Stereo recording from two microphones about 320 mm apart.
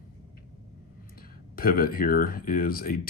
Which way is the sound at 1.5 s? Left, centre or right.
Left.